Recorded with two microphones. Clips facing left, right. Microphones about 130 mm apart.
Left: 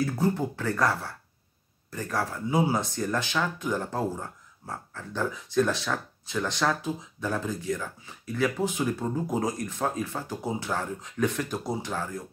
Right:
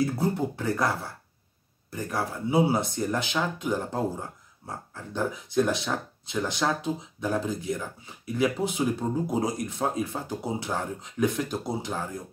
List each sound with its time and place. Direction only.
0.0 s speech: 15° right (ahead or behind)